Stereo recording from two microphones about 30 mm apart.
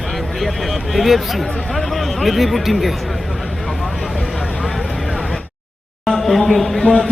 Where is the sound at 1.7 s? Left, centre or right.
Centre.